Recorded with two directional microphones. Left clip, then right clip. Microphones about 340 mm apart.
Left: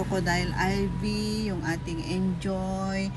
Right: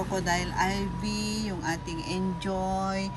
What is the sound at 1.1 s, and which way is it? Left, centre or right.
Speech, right.